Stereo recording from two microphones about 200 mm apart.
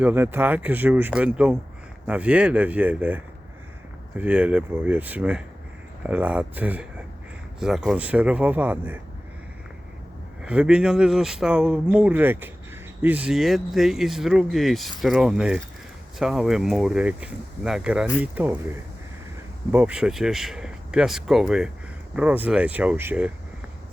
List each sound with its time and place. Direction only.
0.0 s speech: 10° right (ahead or behind)
4.2 s speech: 5° right (ahead or behind)
10.4 s speech: 5° right (ahead or behind)